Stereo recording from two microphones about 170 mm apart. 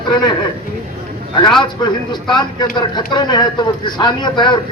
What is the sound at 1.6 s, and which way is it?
A man's voice, 25° left (ahead or behind).